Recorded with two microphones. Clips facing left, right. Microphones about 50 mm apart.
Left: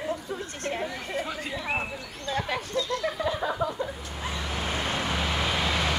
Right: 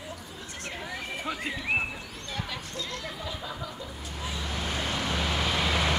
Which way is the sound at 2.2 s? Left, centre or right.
Left.